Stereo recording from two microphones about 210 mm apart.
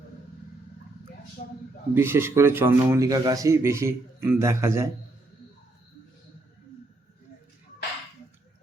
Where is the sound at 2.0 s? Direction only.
10° right (ahead or behind).